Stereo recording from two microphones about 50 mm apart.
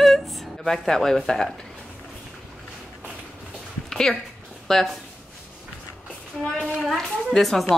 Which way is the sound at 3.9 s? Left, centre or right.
Centre.